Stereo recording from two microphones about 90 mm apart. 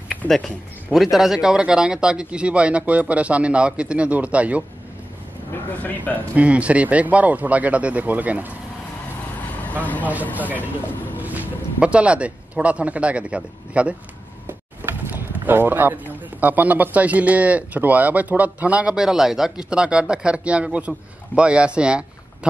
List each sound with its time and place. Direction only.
0.9 s speech: 5° right (ahead or behind)
5.5 s speech: 20° left (ahead or behind)
6.3 s speech: 15° right (ahead or behind)
9.6 s vehicle: 15° left (ahead or behind)
10.3 s speech: 20° right (ahead or behind)